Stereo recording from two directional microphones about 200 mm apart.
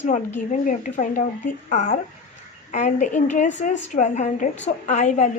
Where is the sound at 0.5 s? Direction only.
40° left (ahead or behind).